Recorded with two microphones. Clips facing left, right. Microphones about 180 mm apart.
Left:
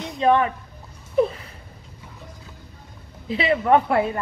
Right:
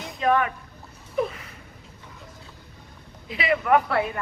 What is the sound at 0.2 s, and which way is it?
Speech, 25° left (ahead or behind).